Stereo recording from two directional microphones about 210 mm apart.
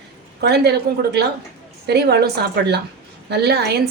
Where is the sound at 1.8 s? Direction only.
50° right (ahead or behind).